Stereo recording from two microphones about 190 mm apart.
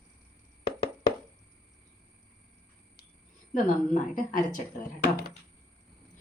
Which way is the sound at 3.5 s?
45° left (ahead or behind).